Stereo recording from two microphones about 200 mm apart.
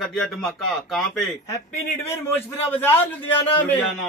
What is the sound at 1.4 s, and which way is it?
A man's voice, 15° left (ahead or behind).